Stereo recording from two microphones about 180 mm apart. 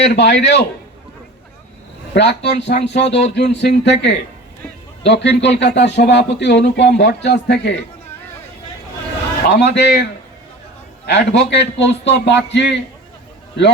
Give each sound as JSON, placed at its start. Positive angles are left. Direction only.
{"t": 0.1, "sound": "speech", "side_deg": 70}
{"t": 2.1, "sound": "speech", "side_deg": 70}
{"t": 9.5, "sound": "speech", "side_deg": 70}